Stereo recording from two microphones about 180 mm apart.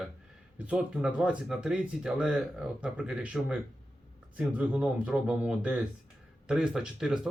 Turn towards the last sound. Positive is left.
turn(degrees=-5)  # may be behind; listen again after turning